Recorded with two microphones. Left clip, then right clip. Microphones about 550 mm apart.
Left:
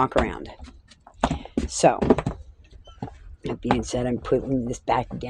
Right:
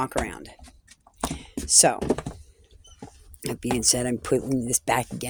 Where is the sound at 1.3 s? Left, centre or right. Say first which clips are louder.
Left 5 dB; right.